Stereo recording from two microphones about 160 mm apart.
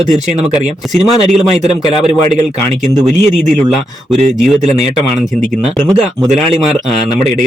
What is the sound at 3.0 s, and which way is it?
Speech, 45° right (ahead or behind).